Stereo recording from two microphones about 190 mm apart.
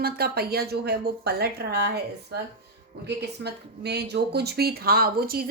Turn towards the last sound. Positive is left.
turn(degrees=-50)  # may be behind; listen again after turning